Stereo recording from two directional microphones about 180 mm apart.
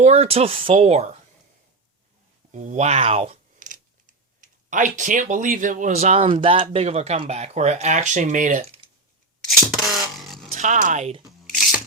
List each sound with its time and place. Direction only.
0.0 s speech: 35° right (ahead or behind)
2.5 s speech: 40° right (ahead or behind)
9.5 s a sound: centre (ahead or behind)
10.5 s speech: 45° right (ahead or behind)